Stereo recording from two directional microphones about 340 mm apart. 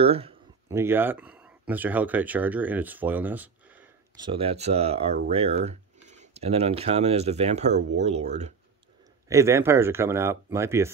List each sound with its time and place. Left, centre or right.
0.0 s speech: centre
9.3 s speech: centre